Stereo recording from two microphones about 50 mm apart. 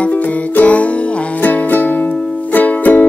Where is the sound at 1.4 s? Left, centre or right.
Left.